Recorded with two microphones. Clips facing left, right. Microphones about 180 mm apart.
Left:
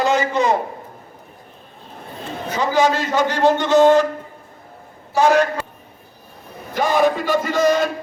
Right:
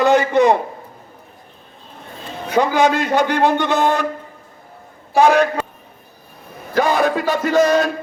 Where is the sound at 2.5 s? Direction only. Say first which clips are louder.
Right 2 dB; 60° right (ahead or behind).